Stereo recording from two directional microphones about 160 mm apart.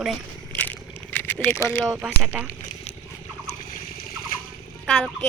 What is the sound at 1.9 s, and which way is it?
Speech, 10° right (ahead or behind).